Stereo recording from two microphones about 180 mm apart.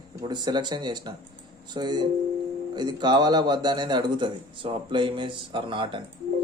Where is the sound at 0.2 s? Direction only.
25° right (ahead or behind).